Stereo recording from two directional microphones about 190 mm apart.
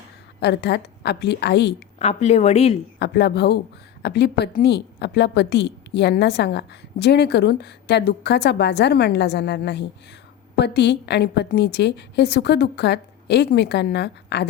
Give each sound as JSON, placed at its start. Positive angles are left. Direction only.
{"t": 0.3, "sound": "a woman's voice", "side_deg": 60}
{"t": 2.0, "sound": "speech", "side_deg": 35}
{"t": 3.0, "sound": "a woman's voice", "side_deg": 60}